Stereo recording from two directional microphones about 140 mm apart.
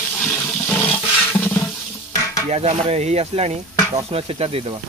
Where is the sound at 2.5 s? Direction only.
50° right (ahead or behind).